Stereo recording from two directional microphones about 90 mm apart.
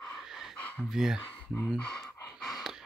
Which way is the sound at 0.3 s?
Centre (ahead or behind).